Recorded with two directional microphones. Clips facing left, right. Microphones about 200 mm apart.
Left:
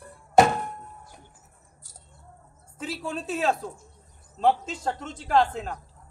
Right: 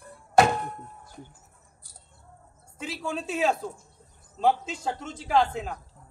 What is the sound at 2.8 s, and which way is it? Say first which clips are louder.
A woman's voice: even; centre (ahead or behind).